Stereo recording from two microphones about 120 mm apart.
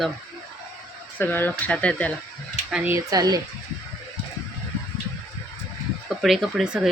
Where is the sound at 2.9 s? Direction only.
30° right (ahead or behind).